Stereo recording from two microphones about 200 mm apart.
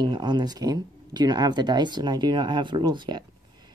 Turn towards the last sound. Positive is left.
turn(degrees=-20)  # may be behind; listen again after turning